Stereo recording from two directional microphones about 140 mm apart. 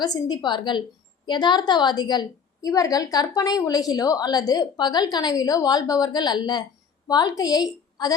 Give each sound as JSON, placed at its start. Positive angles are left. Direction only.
{"t": 0.0, "sound": "a woman's voice", "side_deg": 30}